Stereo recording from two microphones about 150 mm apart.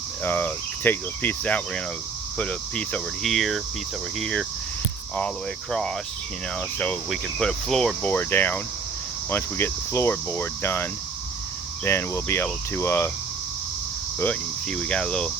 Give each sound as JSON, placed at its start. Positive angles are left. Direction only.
{"t": 0.3, "sound": "speech", "side_deg": 15}
{"t": 5.7, "sound": "speech", "side_deg": 5}
{"t": 7.1, "sound": "speech", "side_deg": 0}
{"t": 11.9, "sound": "speech", "side_deg": 15}
{"t": 14.2, "sound": "speech", "side_deg": 10}